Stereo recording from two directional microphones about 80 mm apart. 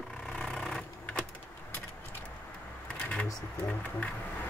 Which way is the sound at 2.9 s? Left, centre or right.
Centre.